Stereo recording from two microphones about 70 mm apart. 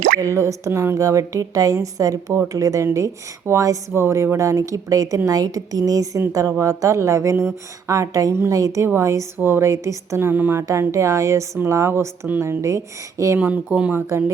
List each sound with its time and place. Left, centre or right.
0.2 s a woman's voice: right
2.8 s a woman's voice: right
10.2 s speech: right
10.6 s a woman's voice: right
13.4 s speech: right
13.9 s speech: right